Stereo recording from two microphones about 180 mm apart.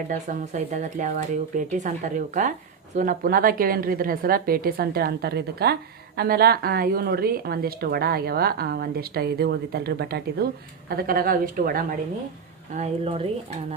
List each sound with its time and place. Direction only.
0.1 s a woman's voice: 45° right (ahead or behind)
12.7 s a woman's voice: 35° right (ahead or behind)